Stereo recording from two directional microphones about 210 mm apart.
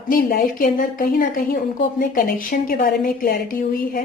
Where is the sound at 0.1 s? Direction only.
40° left (ahead or behind).